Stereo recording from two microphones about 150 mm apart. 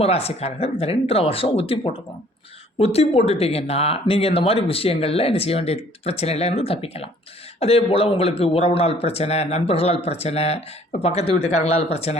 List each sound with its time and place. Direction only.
0.0 s speech: 40° left (ahead or behind)